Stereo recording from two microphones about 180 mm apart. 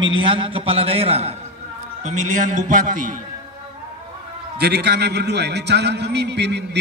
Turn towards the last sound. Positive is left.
turn(degrees=-70)  # may be behind; listen again after turning